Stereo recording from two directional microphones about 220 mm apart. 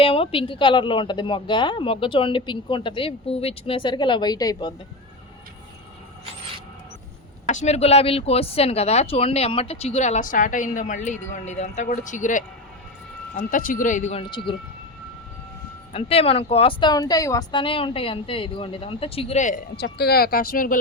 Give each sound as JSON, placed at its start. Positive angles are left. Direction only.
{"t": 0.0, "sound": "a woman's voice", "side_deg": 25}
{"t": 7.5, "sound": "a woman's voice", "side_deg": 30}
{"t": 15.9, "sound": "a woman's voice", "side_deg": 25}
{"t": 19.7, "sound": "speech", "side_deg": 45}